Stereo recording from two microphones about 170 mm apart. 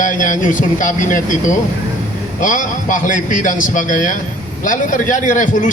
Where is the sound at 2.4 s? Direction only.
50° left (ahead or behind).